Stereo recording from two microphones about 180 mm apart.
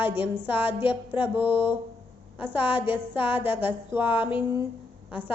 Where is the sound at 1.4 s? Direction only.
30° left (ahead or behind).